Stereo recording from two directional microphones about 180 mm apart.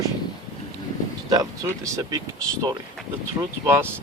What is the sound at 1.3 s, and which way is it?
Speech, 20° right (ahead or behind).